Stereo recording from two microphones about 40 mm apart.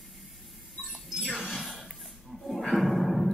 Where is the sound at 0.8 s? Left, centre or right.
Centre.